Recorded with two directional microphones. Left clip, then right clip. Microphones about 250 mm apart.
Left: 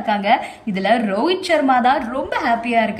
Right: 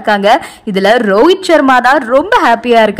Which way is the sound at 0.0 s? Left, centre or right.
Centre.